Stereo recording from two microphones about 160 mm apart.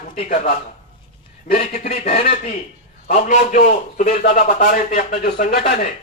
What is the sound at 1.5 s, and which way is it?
A man's voice, 40° left (ahead or behind).